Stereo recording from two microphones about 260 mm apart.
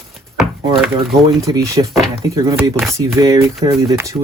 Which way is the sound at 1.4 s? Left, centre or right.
Centre.